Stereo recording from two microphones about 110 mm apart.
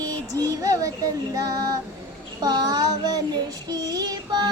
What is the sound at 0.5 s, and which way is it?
Child singing, 30° right (ahead or behind).